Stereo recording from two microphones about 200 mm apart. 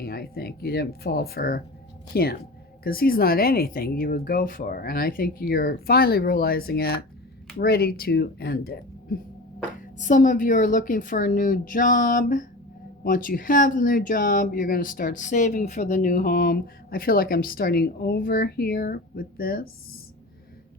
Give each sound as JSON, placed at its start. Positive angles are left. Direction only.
{"t": 0.0, "sound": "speech", "side_deg": 50}
{"t": 10.0, "sound": "a woman's voice", "side_deg": 40}